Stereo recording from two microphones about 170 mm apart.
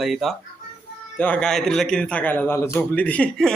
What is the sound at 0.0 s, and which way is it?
A man's voice, centre (ahead or behind).